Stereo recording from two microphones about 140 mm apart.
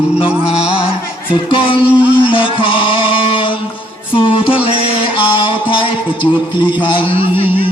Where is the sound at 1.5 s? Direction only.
40° left (ahead or behind).